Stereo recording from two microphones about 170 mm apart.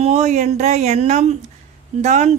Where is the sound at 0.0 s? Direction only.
40° right (ahead or behind).